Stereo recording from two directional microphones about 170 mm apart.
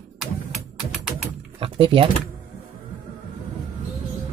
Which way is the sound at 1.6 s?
30° right (ahead or behind).